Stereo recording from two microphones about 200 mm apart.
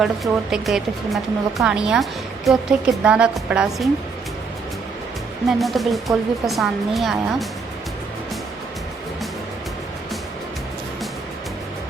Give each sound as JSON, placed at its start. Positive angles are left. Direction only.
{"t": 0.5, "sound": "a woman's voice", "side_deg": 0}
{"t": 5.5, "sound": "a woman's voice", "side_deg": 0}